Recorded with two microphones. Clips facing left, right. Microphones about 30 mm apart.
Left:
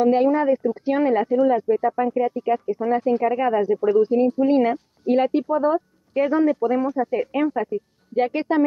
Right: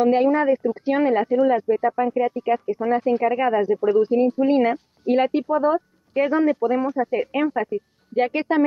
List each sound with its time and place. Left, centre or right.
0.0 s speech: centre